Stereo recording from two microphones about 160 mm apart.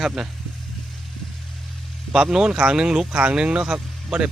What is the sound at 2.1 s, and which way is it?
Speech, 5° right (ahead or behind).